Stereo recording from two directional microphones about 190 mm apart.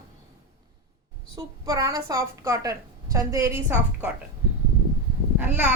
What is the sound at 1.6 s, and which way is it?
A woman's voice, 20° right (ahead or behind).